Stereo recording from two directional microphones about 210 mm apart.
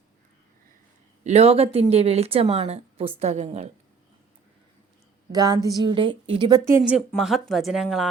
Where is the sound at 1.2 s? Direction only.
30° right (ahead or behind).